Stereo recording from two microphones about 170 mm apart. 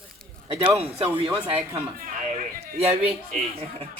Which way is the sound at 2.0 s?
55° right (ahead or behind).